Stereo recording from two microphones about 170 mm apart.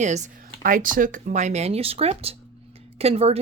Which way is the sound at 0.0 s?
45° right (ahead or behind).